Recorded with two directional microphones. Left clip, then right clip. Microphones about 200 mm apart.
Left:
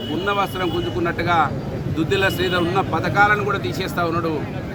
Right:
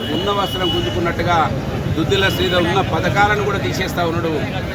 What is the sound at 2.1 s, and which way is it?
Speech, 15° left (ahead or behind).